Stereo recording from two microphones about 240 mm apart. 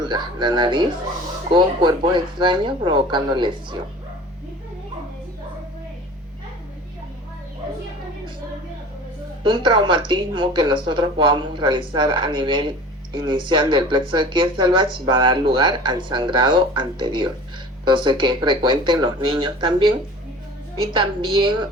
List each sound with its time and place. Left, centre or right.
0.0 s speech: centre
9.4 s speech: centre